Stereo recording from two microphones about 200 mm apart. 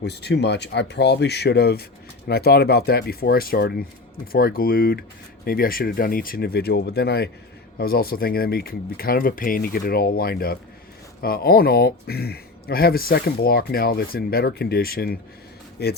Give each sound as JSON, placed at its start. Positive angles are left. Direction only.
{"t": 0.0, "sound": "speech", "side_deg": 55}